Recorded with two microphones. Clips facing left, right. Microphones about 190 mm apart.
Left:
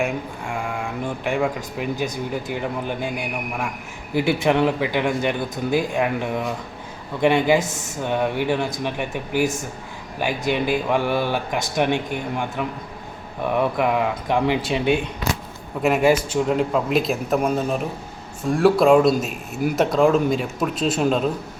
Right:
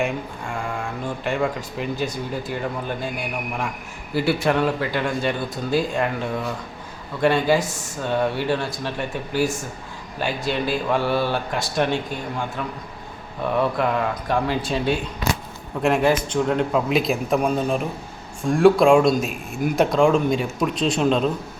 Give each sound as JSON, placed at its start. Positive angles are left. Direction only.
{"t": 0.0, "sound": "speech", "side_deg": 5}
{"t": 4.1, "sound": "speech", "side_deg": 15}
{"t": 15.8, "sound": "speech", "side_deg": 5}